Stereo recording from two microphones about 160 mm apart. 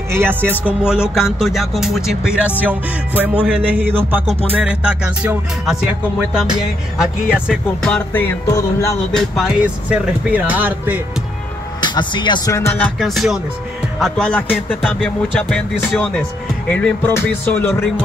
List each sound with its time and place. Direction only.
0.1 s speech: 15° right (ahead or behind)
4.3 s music: 40° right (ahead or behind)
4.6 s speech: 5° right (ahead or behind)
7.0 s speech: 5° right (ahead or behind)
7.8 s speech: 10° left (ahead or behind)
9.1 s speech: centre (ahead or behind)
11.8 s speech: 30° left (ahead or behind)
12.5 s speech: 10° left (ahead or behind)